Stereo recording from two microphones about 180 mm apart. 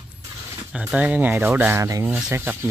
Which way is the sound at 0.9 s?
10° right (ahead or behind).